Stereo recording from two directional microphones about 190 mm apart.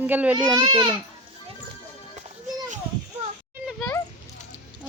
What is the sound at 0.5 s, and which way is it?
Speech, 25° right (ahead or behind).